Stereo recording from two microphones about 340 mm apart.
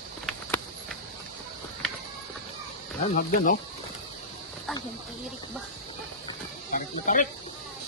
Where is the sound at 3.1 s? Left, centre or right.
Left.